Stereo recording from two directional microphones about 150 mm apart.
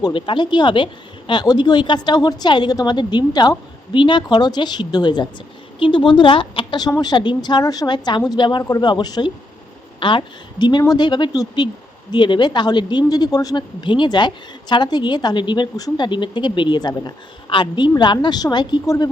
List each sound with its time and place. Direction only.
0.0 s speech: 35° left (ahead or behind)